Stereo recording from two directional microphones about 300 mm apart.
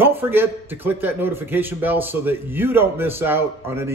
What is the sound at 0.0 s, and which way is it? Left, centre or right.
A man's voice, centre.